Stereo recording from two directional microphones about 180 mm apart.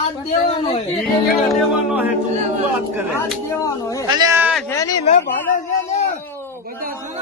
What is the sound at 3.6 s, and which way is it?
Speech, 20° left (ahead or behind).